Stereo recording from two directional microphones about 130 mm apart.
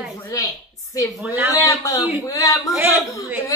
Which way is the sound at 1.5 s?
25° left (ahead or behind).